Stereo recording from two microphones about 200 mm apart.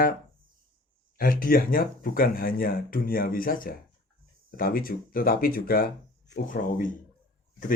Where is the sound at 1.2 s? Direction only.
45° left (ahead or behind).